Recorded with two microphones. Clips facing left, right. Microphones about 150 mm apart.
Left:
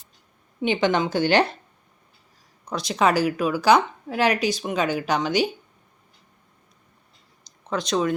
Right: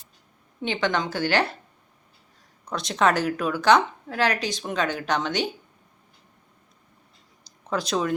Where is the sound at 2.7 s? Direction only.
Centre (ahead or behind).